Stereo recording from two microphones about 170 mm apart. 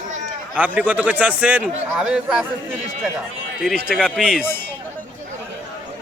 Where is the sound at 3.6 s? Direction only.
Centre (ahead or behind).